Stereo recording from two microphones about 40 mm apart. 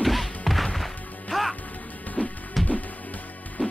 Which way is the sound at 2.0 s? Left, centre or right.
Left.